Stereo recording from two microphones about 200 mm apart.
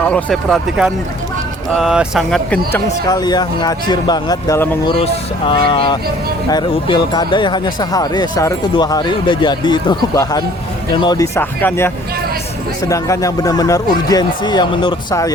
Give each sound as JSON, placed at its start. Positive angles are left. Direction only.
{"t": 0.0, "sound": "speech", "side_deg": 5}
{"t": 3.2, "sound": "speech", "side_deg": 20}
{"t": 5.5, "sound": "speech", "side_deg": 25}